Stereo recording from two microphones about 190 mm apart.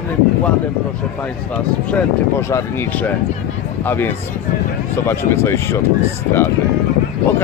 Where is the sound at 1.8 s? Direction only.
10° left (ahead or behind).